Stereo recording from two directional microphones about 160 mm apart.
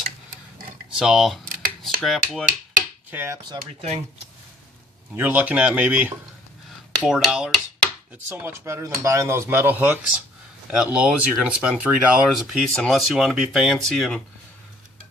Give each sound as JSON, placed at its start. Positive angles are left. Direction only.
{"t": 0.9, "sound": "speech", "side_deg": 0}
{"t": 3.1, "sound": "speech", "side_deg": -15}
{"t": 3.5, "sound": "speech", "side_deg": -35}
{"t": 5.1, "sound": "speech", "side_deg": -10}
{"t": 8.3, "sound": "speech", "side_deg": -15}